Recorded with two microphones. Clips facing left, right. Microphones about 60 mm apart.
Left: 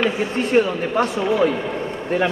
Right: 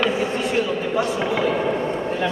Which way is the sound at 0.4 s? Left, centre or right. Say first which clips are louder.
Left 4 dB; left.